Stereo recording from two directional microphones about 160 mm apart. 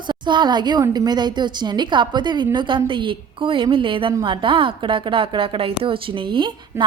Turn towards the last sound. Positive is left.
turn(degrees=-30)  # may be behind; listen again after turning